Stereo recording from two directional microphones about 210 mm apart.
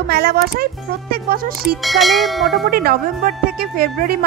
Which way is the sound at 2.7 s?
45° right (ahead or behind).